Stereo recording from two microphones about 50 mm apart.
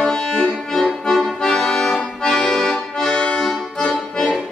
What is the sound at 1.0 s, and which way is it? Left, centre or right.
Accordion, centre.